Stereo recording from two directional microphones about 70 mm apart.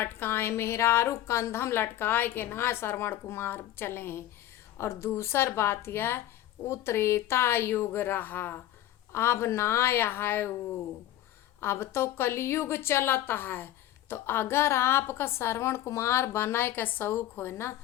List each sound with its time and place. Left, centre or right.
0.0 s a woman's voice: left
11.6 s a woman's voice: left